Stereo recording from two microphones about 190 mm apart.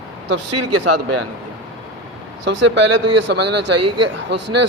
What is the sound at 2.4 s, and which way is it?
A man's voice, 75° right (ahead or behind).